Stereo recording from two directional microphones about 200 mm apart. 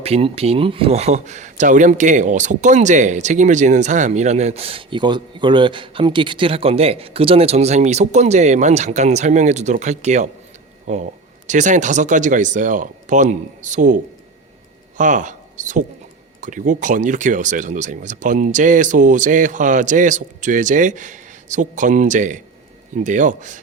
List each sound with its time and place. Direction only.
0.0 s speech: 30° right (ahead or behind)